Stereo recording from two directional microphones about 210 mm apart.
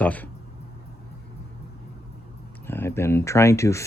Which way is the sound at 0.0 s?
5° left (ahead or behind).